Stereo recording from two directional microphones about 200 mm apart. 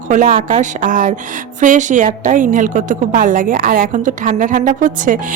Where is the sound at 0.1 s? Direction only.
40° right (ahead or behind).